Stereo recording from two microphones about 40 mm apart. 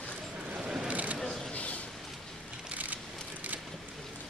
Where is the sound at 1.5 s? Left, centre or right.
Left.